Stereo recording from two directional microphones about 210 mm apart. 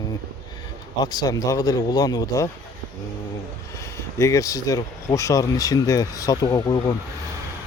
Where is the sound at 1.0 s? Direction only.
20° left (ahead or behind).